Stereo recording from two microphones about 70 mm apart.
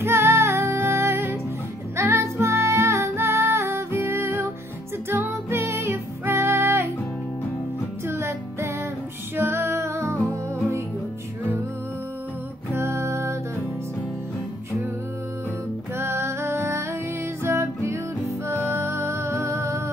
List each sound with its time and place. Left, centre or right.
0.0 s music: right
8.1 s music: right
12.7 s music: right
16.0 s music: right